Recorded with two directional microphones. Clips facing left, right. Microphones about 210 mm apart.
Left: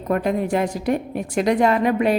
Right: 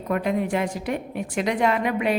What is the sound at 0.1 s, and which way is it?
A woman's voice, 40° left (ahead or behind).